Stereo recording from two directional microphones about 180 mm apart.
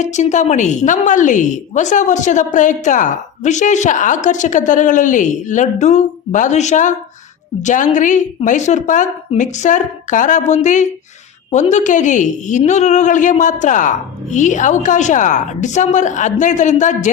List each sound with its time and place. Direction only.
0.0 s a woman's voice: 40° left (ahead or behind)